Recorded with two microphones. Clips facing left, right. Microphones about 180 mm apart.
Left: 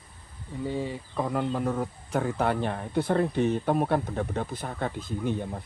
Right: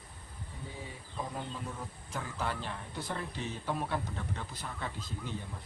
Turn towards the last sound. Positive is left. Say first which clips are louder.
# left 11 dB
turn(degrees=55)  # may be behind; listen again after turning